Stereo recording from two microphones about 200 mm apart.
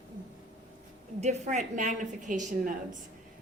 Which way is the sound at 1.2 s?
35° right (ahead or behind).